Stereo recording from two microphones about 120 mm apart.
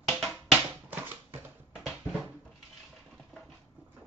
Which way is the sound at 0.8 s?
15° right (ahead or behind).